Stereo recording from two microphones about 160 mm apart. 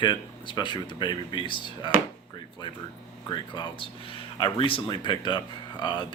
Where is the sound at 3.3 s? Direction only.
30° left (ahead or behind).